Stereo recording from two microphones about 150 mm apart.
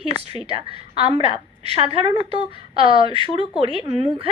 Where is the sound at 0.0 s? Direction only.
40° right (ahead or behind).